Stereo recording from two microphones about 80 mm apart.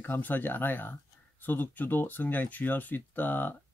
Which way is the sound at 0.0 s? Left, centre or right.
Left.